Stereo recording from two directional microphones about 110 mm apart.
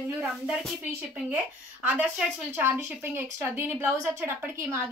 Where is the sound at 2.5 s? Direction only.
20° right (ahead or behind).